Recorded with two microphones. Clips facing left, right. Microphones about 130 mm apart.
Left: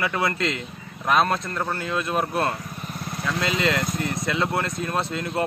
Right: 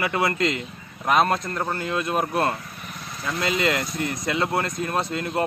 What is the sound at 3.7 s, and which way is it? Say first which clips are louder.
Speech: left 1 dB; 50° left (ahead or behind).